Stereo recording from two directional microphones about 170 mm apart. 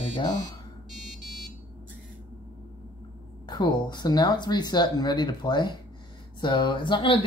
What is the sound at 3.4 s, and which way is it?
Speech, 25° left (ahead or behind).